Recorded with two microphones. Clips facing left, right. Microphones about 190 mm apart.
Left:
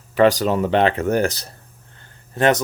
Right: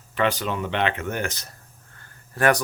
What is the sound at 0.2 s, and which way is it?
Speech, 40° left (ahead or behind).